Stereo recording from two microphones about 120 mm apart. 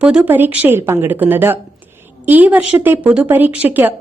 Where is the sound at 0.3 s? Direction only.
15° right (ahead or behind).